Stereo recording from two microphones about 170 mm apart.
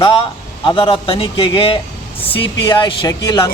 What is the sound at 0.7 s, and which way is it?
A man's voice, 30° left (ahead or behind).